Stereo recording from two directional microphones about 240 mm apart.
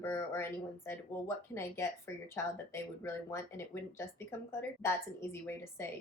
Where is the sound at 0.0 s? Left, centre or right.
Centre.